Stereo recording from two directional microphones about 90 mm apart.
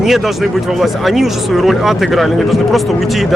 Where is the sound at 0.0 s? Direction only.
Centre (ahead or behind).